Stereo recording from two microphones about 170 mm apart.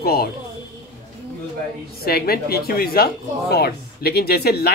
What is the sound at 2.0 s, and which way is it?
Speech, 65° left (ahead or behind).